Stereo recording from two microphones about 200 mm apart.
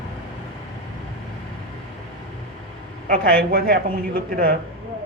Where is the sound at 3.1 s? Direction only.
45° right (ahead or behind).